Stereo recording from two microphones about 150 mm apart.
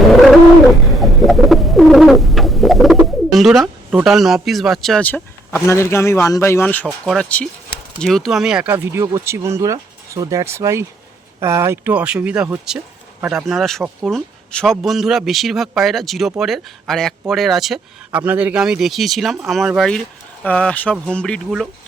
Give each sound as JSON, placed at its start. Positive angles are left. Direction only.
{"t": 0.1, "sound": "bird", "side_deg": 0}
{"t": 4.0, "sound": "speech", "side_deg": 0}